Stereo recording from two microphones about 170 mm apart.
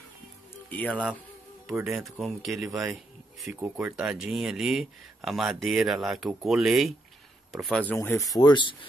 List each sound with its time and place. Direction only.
0.7 s speech: 10° left (ahead or behind)
7.9 s speech: 15° left (ahead or behind)